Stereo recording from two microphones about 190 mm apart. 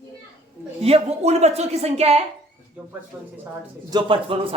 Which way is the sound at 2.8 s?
10° right (ahead or behind).